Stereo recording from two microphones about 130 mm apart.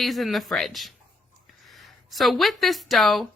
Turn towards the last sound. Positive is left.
turn(degrees=0)  # may be behind; listen again after turning